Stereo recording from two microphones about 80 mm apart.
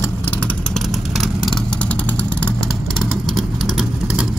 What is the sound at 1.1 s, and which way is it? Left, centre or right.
Vehicle, centre.